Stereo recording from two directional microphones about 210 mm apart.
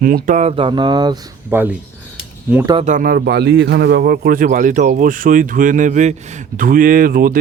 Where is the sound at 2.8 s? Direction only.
40° right (ahead or behind).